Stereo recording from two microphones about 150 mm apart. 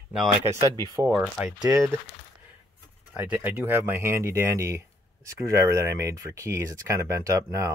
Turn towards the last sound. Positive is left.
turn(degrees=-20)  # may be behind; listen again after turning